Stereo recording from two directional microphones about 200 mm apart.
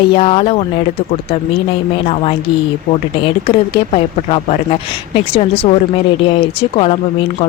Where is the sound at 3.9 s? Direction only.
30° left (ahead or behind).